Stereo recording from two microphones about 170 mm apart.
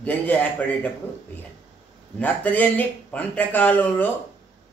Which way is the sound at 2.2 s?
10° left (ahead or behind).